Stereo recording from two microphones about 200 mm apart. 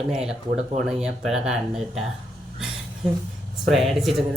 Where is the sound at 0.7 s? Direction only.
35° right (ahead or behind).